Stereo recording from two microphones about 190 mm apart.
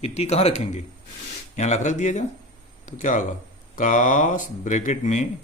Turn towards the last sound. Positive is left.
turn(degrees=40)  # may be behind; listen again after turning